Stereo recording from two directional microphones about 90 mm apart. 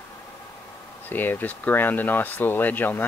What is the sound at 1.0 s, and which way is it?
Speech, 20° left (ahead or behind).